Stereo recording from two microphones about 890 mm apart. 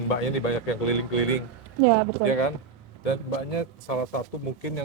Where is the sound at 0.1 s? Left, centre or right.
Left.